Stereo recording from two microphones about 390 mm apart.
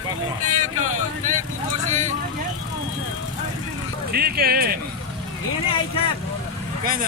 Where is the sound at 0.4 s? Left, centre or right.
Centre.